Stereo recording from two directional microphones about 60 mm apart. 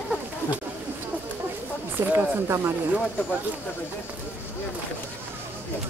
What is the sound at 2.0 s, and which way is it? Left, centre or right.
Speech, right.